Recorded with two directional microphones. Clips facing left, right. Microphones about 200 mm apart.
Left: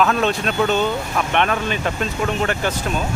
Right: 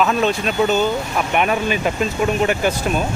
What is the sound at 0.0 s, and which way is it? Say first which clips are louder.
Speech: right 1 dB; centre (ahead or behind).